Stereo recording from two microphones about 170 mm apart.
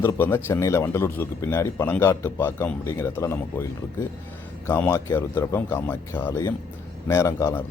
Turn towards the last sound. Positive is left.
turn(degrees=15)  # may be behind; listen again after turning